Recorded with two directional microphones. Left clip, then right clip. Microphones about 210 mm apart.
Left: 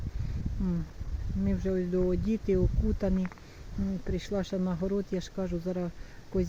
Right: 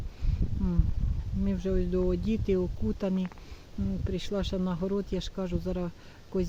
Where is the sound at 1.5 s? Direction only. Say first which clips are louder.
Even; 5° right (ahead or behind).